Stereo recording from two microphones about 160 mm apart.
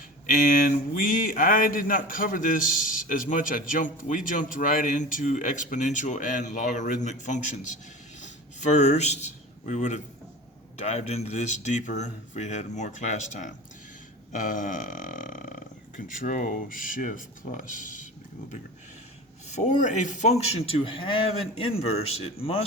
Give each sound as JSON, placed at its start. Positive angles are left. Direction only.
{"t": 0.3, "sound": "speech", "side_deg": 55}
{"t": 8.2, "sound": "a sound", "side_deg": 45}
{"t": 10.8, "sound": "speech", "side_deg": 40}
{"t": 19.5, "sound": "a man's voice", "side_deg": 45}